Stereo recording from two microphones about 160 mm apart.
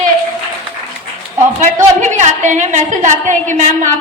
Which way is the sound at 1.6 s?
50° right (ahead or behind).